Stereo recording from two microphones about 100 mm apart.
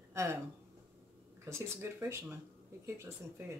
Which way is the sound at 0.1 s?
25° right (ahead or behind).